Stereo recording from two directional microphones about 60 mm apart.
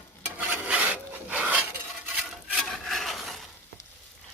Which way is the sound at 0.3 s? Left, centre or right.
Right.